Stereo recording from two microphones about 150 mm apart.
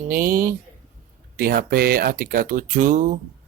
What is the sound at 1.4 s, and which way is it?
Speech, 85° right.